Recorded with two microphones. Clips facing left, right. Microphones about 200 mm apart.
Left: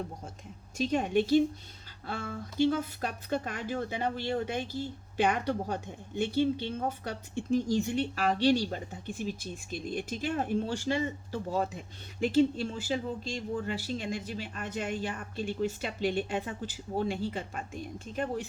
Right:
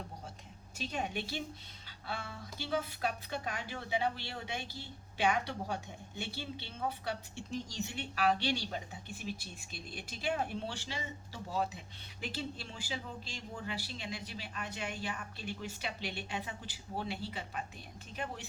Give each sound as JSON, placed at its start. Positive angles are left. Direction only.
{"t": 0.8, "sound": "speech", "side_deg": 45}